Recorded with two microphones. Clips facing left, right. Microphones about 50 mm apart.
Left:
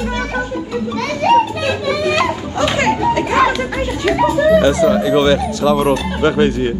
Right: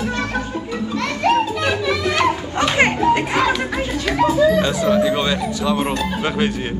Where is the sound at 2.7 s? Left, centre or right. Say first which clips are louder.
Right 1 dB; right.